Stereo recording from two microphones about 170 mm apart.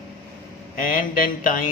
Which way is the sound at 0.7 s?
55° left (ahead or behind).